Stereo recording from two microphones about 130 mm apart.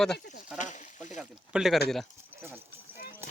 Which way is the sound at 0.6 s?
70° left (ahead or behind).